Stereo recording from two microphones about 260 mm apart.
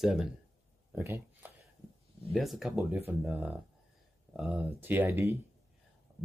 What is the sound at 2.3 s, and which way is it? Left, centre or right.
Speech, centre.